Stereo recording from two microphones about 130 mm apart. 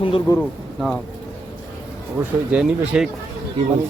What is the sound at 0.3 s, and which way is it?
Speech, 25° left (ahead or behind).